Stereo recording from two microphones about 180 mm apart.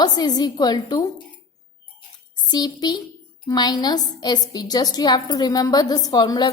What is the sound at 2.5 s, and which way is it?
A woman's voice, 25° left (ahead or behind).